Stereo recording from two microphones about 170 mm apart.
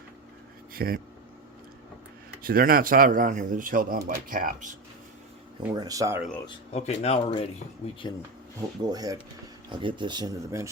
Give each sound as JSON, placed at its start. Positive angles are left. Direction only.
{"t": 0.7, "sound": "speech", "side_deg": -60}
{"t": 2.4, "sound": "speech", "side_deg": -60}
{"t": 5.7, "sound": "speech", "side_deg": -20}
{"t": 6.7, "sound": "speech", "side_deg": 40}
{"t": 8.8, "sound": "speech", "side_deg": -25}